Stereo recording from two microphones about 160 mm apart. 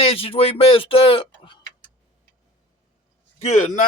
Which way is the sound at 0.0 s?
35° left (ahead or behind).